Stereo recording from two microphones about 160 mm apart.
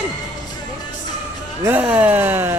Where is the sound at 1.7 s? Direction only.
10° right (ahead or behind).